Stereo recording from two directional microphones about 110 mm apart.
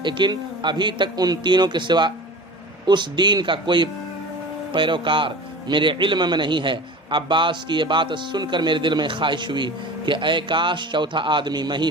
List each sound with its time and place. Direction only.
0.0 s a man's voice: 45° right (ahead or behind)